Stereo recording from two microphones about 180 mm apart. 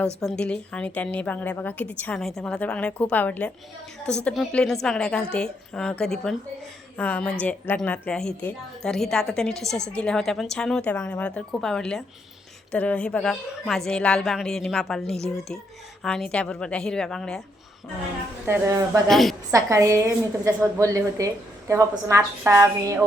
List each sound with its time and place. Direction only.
0.2 s a woman's voice: 5° left (ahead or behind)
18.4 s a woman's voice: 15° right (ahead or behind)
19.0 s a woman's voice: centre (ahead or behind)
19.5 s a woman's voice: 15° right (ahead or behind)